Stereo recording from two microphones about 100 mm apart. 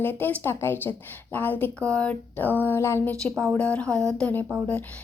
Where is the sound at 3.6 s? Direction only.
10° left (ahead or behind).